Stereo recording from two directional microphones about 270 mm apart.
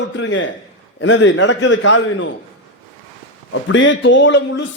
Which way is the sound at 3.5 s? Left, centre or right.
Left.